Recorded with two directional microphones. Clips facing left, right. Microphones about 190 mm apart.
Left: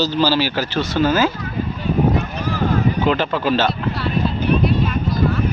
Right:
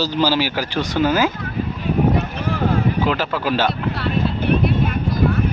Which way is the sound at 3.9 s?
60° right (ahead or behind).